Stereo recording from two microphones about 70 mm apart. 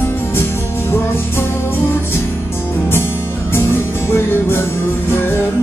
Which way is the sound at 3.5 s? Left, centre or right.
Left.